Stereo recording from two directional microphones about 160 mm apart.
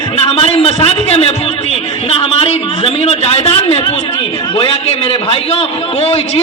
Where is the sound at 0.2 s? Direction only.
40° left (ahead or behind).